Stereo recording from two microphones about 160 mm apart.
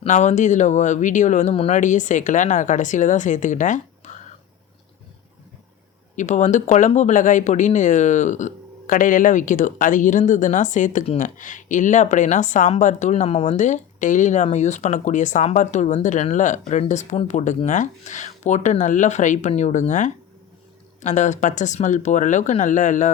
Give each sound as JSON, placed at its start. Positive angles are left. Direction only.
{"t": 0.0, "sound": "speech", "side_deg": 45}
{"t": 6.1, "sound": "speech", "side_deg": 50}